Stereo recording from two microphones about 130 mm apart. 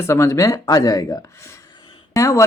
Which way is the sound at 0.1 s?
20° left (ahead or behind).